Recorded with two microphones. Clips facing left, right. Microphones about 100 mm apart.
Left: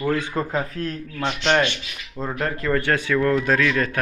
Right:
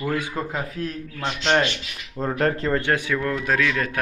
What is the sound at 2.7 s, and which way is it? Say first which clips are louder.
Speech: left 1 dB; 20° right (ahead or behind).